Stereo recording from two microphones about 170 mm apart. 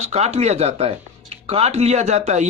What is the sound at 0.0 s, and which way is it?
Speech, 40° right (ahead or behind).